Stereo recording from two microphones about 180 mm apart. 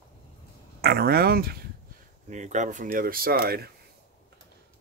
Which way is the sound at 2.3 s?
40° right (ahead or behind).